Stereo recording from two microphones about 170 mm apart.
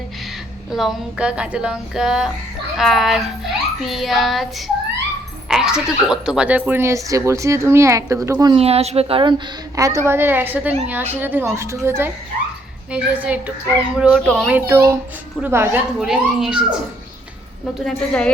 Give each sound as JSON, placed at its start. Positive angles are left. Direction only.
{"t": 0.7, "sound": "a child's voice", "side_deg": 0}
{"t": 8.5, "sound": "speech", "side_deg": -35}
{"t": 9.7, "sound": "a child's voice", "side_deg": -20}
{"t": 14.7, "sound": "a child's voice", "side_deg": -15}
{"t": 17.8, "sound": "a child's voice", "side_deg": 5}